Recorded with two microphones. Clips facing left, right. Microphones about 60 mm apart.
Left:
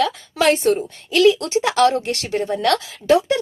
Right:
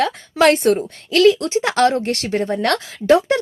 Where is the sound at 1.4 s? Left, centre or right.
Right.